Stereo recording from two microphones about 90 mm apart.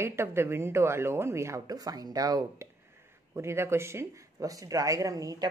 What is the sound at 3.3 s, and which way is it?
Speech, 30° right (ahead or behind).